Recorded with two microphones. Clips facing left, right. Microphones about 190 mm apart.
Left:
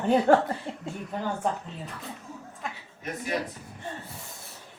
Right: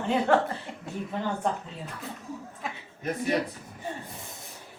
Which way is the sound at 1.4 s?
5° left (ahead or behind).